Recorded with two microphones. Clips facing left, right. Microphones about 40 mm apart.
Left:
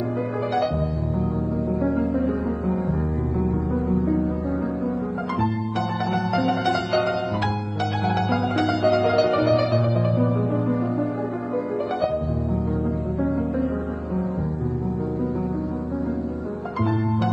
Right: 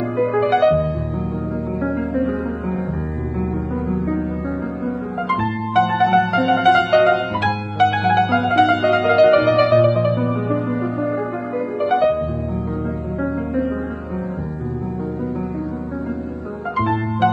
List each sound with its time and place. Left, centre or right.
0.2 s music: right
1.9 s music: right
5.3 s music: right
11.9 s music: right